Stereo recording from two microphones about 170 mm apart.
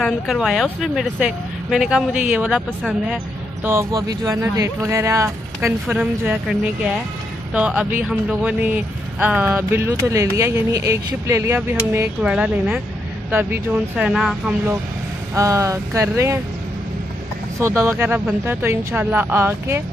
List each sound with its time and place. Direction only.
0.0 s speech: centre (ahead or behind)
3.6 s speech: 20° right (ahead or behind)
5.9 s speech: 5° right (ahead or behind)
15.3 s speech: 15° right (ahead or behind)
17.6 s speech: 15° right (ahead or behind)